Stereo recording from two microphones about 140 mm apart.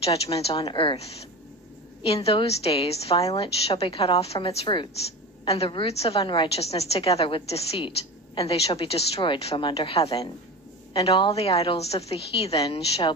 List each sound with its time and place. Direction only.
0.0 s a woman's voice: 45° left (ahead or behind)